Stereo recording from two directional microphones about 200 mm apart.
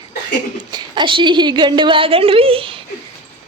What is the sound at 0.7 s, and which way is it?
A woman's voice, 20° right (ahead or behind).